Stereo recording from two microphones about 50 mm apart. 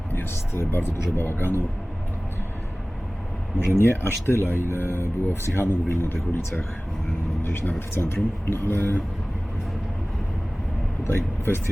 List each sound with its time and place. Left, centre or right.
0.1 s speech: left
3.7 s speech: left
7.9 s speech: left
11.0 s speech: left